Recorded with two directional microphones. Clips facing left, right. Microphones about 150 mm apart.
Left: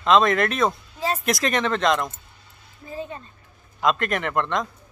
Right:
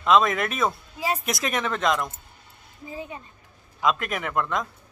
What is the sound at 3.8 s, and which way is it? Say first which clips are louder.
Speech: left 3 dB; 5° right (ahead or behind).